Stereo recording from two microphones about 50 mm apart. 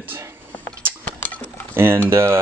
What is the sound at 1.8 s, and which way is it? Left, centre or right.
Speech, right.